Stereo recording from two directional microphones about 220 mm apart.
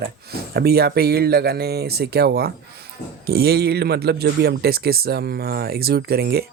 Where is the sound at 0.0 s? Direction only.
45° right (ahead or behind).